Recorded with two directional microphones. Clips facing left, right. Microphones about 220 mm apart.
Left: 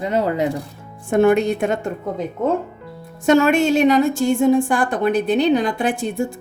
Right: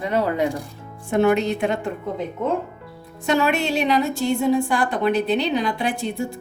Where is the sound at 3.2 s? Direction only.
45° left (ahead or behind).